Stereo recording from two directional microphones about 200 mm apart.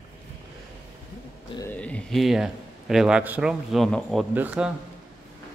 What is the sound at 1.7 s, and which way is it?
Speech, 5° left (ahead or behind).